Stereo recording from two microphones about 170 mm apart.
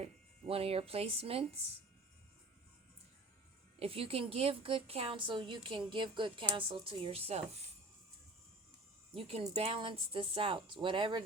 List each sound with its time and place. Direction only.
0.0 s speech: 35° right (ahead or behind)
3.8 s a woman's voice: 35° right (ahead or behind)
9.1 s a woman's voice: 35° right (ahead or behind)